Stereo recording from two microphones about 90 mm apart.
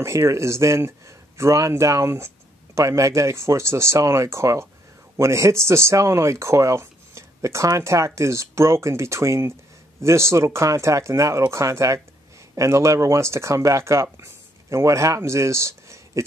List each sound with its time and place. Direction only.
0.0 s a man's voice: 35° right (ahead or behind)